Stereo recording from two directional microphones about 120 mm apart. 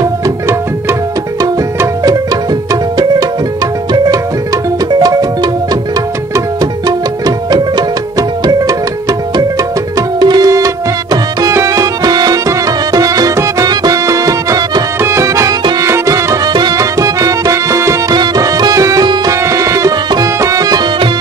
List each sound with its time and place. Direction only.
0.0 s tabla: 20° right (ahead or behind)
4.9 s music: 35° right (ahead or behind)
9.9 s music: 35° right (ahead or behind)